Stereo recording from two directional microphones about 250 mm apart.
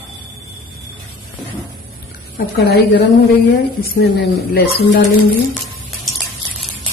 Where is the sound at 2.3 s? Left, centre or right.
Left.